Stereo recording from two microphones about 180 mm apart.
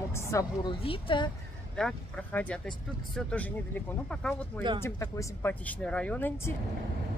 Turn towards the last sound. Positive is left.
turn(degrees=10)  # may be behind; listen again after turning